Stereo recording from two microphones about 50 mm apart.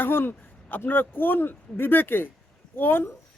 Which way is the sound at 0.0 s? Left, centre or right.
Left.